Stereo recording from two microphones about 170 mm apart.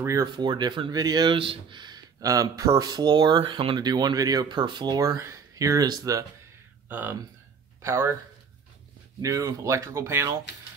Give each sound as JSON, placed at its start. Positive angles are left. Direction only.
{"t": 0.0, "sound": "speech", "side_deg": -20}
{"t": 9.2, "sound": "speech", "side_deg": -20}